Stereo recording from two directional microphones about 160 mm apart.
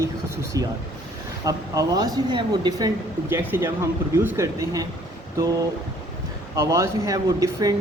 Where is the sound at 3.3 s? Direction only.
15° right (ahead or behind).